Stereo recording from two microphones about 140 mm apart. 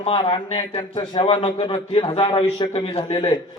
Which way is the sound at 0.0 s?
40° left (ahead or behind).